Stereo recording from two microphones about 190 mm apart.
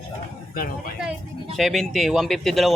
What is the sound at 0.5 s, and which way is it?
Speech, 50° left (ahead or behind).